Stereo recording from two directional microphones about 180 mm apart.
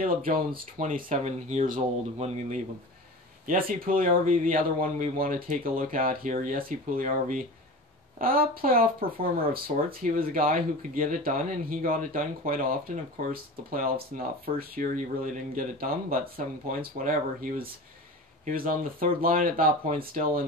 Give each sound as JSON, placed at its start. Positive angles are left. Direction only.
{"t": 0.0, "sound": "speech", "side_deg": -50}
{"t": 3.4, "sound": "speech", "side_deg": -50}